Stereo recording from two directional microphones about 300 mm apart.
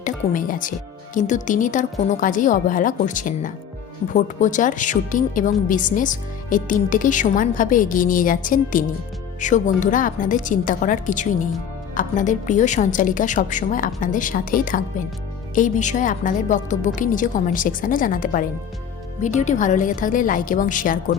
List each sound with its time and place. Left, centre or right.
0.0 s a woman's voice: left